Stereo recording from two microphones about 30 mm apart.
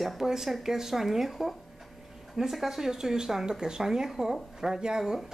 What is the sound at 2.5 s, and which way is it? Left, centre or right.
Speech, centre.